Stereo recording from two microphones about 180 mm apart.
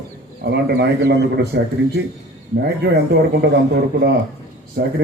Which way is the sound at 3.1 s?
65° right (ahead or behind).